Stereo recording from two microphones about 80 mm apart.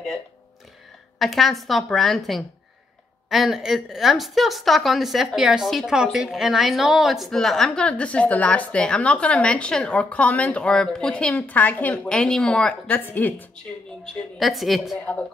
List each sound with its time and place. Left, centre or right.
1.2 s a woman's voice: centre
12.9 s speech: left
14.0 s a woman's voice: centre